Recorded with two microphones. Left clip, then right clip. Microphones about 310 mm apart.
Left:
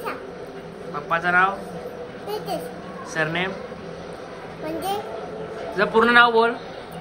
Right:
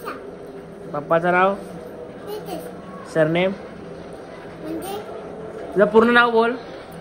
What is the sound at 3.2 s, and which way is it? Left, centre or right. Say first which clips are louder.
Speech: right 5 dB; centre.